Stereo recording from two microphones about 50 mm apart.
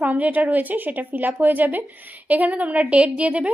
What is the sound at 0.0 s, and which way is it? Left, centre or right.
Speech, right.